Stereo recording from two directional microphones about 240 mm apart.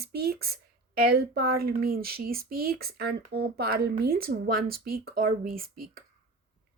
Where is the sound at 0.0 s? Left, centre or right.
Right.